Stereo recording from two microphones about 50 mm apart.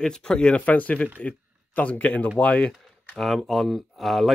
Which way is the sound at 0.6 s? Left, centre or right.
Left.